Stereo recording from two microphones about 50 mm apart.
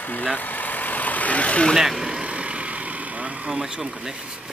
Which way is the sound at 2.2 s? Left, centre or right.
Right.